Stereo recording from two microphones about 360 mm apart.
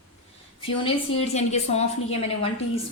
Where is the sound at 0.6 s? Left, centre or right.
Centre.